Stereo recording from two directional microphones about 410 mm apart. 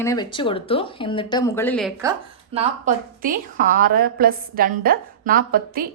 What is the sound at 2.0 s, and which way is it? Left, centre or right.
A woman's voice, centre.